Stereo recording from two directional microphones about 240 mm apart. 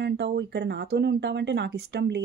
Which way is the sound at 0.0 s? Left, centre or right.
Right.